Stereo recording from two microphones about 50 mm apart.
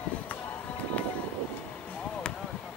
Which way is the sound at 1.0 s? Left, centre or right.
Left.